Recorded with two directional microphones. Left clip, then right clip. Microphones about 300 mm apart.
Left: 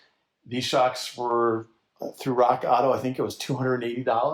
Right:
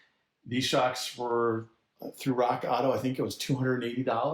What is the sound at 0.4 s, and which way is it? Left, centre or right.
Speech, centre.